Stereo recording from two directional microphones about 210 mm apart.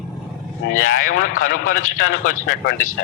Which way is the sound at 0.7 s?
40° left (ahead or behind).